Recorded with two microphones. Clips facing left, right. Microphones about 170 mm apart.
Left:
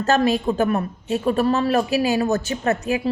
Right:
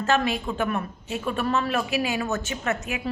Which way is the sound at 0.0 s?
40° left (ahead or behind).